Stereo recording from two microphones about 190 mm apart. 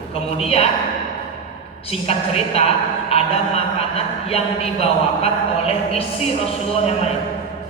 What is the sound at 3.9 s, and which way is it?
Speech, 30° left (ahead or behind).